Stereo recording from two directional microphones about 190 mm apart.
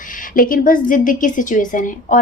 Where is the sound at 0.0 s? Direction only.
45° left (ahead or behind).